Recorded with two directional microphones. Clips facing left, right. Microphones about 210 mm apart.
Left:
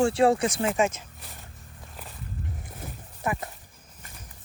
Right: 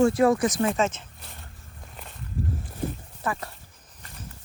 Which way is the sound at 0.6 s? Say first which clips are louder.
Right 1 dB; 15° left (ahead or behind).